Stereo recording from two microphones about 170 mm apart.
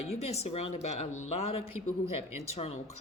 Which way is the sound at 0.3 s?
40° left (ahead or behind).